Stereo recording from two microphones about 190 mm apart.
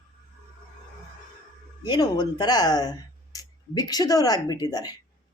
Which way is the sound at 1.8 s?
20° left (ahead or behind).